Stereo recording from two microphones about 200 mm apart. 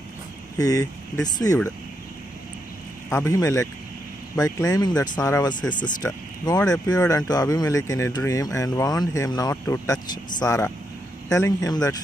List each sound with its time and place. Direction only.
0.6 s speech: 15° left (ahead or behind)
3.1 s speech: 15° left (ahead or behind)